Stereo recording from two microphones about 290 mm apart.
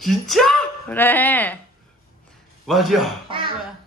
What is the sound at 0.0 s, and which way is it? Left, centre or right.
Speech, centre.